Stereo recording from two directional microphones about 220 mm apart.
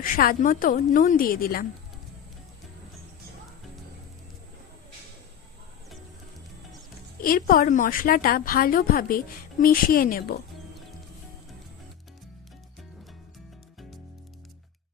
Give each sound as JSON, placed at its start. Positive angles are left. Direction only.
{"t": 0.0, "sound": "a woman's voice", "side_deg": 40}
{"t": 7.2, "sound": "a woman's voice", "side_deg": 40}